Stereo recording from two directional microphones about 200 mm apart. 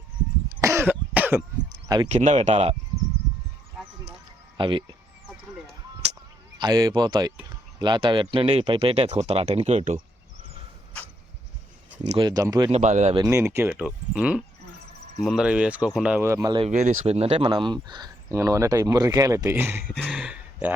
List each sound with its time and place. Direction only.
0.6 s cough: 15° right (ahead or behind)
2.0 s speech: 35° right (ahead or behind)
4.5 s speech: 25° right (ahead or behind)
6.6 s speech: 20° right (ahead or behind)
12.0 s speech: 25° right (ahead or behind)
12.7 s speech: 35° right (ahead or behind)
13.1 s speech: 15° right (ahead or behind)
16.6 s speech: 35° right (ahead or behind); by 19.8 s 10° right (ahead or behind)
19.9 s speech: centre (ahead or behind)